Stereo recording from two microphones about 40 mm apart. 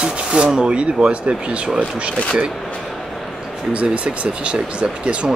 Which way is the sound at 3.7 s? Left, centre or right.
Right.